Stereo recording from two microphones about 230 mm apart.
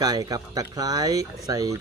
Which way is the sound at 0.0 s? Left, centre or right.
Centre.